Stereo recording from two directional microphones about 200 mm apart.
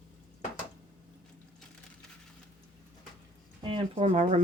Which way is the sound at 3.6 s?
25° right (ahead or behind).